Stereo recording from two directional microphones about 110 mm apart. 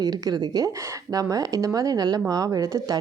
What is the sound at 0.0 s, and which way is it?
Speech, 35° right (ahead or behind).